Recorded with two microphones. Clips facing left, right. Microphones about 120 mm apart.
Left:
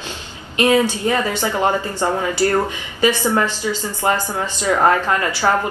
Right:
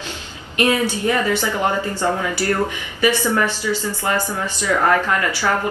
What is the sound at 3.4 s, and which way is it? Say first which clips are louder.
A woman's voice: even; 15° left (ahead or behind).